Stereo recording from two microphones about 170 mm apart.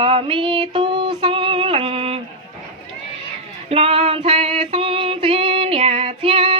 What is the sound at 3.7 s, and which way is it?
Music, 35° right (ahead or behind).